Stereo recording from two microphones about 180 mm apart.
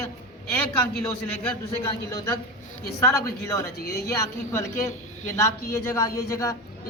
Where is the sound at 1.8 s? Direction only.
20° left (ahead or behind).